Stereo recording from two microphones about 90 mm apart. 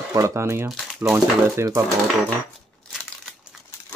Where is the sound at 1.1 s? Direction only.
30° right (ahead or behind).